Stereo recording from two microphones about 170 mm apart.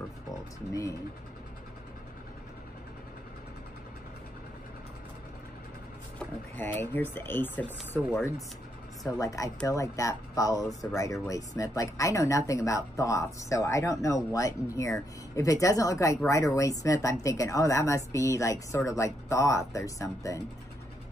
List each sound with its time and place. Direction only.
6.1 s a woman's voice: 10° left (ahead or behind)